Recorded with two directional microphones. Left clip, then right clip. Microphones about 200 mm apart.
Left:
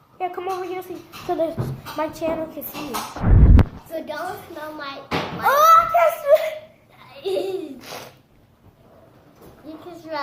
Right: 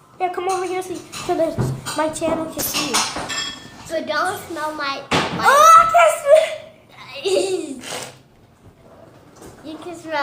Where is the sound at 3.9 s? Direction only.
10° right (ahead or behind).